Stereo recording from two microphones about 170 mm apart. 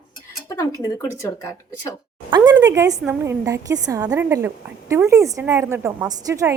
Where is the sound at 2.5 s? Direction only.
15° right (ahead or behind).